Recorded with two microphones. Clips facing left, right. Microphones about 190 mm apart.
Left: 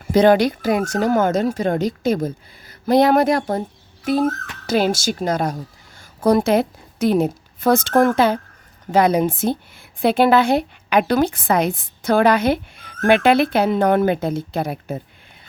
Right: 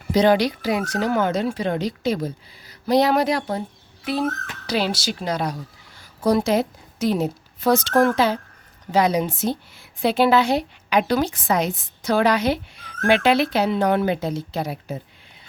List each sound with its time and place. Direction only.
0.1 s a woman's voice: 50° left (ahead or behind)